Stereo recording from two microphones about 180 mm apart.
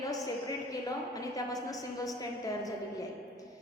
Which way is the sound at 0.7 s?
20° left (ahead or behind).